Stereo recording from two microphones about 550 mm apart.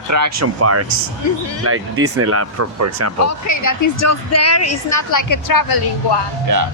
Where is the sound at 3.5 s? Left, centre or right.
Left.